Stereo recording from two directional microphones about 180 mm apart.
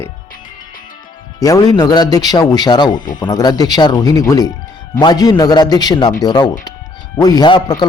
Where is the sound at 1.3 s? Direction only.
20° left (ahead or behind).